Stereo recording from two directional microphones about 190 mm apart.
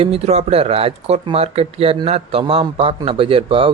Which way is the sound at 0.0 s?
30° right (ahead or behind).